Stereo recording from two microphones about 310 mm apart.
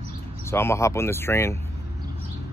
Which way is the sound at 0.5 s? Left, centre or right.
Centre.